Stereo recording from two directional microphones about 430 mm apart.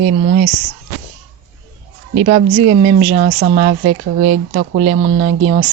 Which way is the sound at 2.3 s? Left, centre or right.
Centre.